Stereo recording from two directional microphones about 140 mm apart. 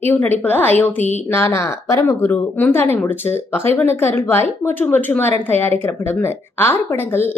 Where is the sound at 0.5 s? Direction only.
15° left (ahead or behind).